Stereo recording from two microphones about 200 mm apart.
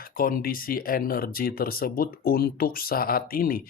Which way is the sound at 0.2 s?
45° left (ahead or behind).